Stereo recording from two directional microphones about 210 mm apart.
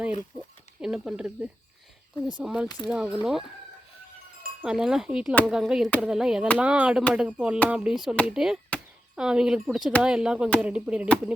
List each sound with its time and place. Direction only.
0.3 s speech: centre (ahead or behind)
2.6 s speech: 20° left (ahead or behind)
2.9 s speech: 5° right (ahead or behind)
4.6 s speech: 5° right (ahead or behind)